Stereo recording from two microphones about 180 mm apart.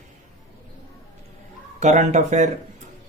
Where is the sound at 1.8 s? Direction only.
40° right (ahead or behind).